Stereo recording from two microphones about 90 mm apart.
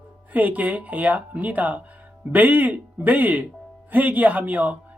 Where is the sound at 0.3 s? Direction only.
20° right (ahead or behind).